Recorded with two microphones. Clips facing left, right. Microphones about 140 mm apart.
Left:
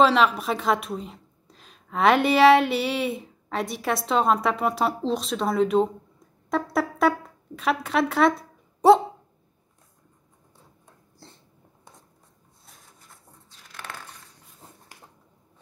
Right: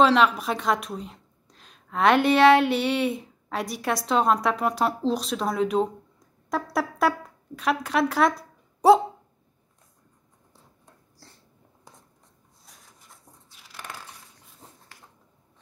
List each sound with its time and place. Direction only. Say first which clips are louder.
0.0 s a woman's voice: even; centre (ahead or behind)
11.2 s a sound: left 5 dB; 25° left (ahead or behind)
12.6 s rub: left 1 dB; centre (ahead or behind)
13.5 s crushing: left 1 dB; 10° right (ahead or behind)